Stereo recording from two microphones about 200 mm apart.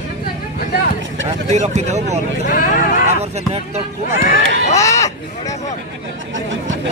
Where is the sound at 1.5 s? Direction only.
35° right (ahead or behind).